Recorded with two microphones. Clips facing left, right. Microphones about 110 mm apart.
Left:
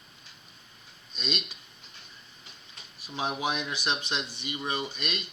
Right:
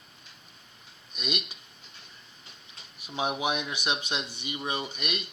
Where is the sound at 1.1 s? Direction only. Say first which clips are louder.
Even; 10° right (ahead or behind).